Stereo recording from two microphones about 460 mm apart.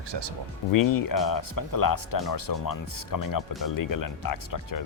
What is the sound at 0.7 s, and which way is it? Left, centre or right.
Speech, left.